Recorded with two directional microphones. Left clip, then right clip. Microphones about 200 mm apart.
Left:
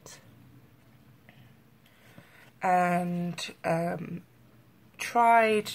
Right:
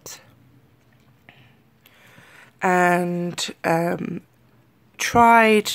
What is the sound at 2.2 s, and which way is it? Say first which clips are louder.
Speech: right 8 dB; 50° right (ahead or behind).